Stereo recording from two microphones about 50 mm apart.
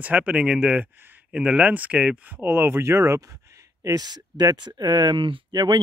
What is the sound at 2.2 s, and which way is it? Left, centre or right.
Speech, right.